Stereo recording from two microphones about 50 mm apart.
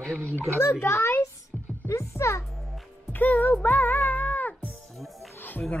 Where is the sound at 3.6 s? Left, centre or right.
Left.